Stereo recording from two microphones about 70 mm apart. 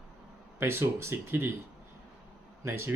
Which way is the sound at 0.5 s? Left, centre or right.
Right.